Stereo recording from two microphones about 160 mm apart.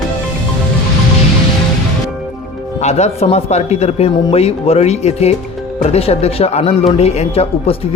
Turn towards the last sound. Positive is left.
turn(degrees=40)  # may be behind; listen again after turning